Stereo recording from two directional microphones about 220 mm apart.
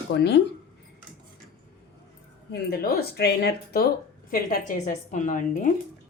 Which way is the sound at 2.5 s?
45° left (ahead or behind).